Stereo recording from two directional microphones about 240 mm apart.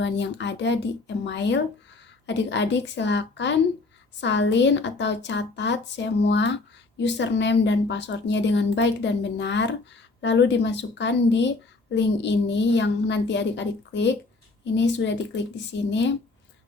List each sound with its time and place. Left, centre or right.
0.0 s speech: left